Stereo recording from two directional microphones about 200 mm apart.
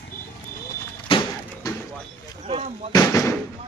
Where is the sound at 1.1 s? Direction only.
25° left (ahead or behind).